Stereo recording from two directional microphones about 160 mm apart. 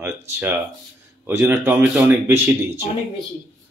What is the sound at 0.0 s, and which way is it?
Speech, 15° right (ahead or behind).